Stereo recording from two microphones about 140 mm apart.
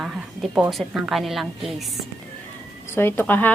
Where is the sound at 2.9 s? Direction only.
15° left (ahead or behind).